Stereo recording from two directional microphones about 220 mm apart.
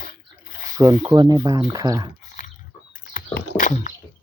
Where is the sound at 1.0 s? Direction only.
20° right (ahead or behind).